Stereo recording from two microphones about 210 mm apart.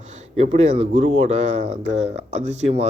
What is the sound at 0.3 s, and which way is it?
Speech, 30° right (ahead or behind).